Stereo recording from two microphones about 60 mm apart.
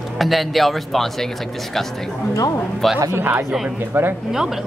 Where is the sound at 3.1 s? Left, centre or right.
Right.